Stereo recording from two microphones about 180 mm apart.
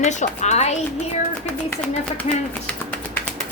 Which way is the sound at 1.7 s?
10° left (ahead or behind).